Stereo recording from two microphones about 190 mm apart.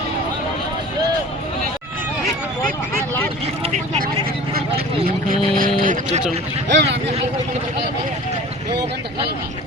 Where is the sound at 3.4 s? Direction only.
30° right (ahead or behind).